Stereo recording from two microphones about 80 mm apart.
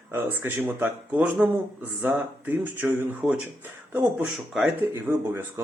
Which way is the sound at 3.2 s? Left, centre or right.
Centre.